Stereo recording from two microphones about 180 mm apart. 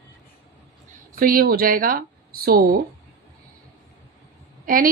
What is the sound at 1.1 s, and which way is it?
A woman's voice, 50° right (ahead or behind).